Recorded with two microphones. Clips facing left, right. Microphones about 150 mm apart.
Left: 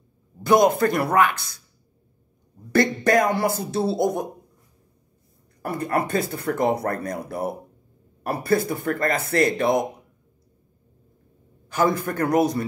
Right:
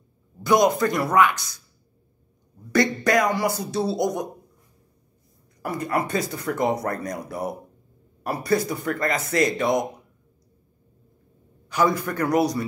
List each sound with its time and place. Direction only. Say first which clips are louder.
0.4 s speech: left 2 dB; 55° left (ahead or behind)
2.7 s speech: left 1 dB; 55° left (ahead or behind)
5.9 s speech: left 2 dB; 55° left (ahead or behind)
11.7 s a man's voice: even; 50° left (ahead or behind)